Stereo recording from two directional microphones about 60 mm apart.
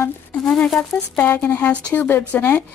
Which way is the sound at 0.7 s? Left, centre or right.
Centre.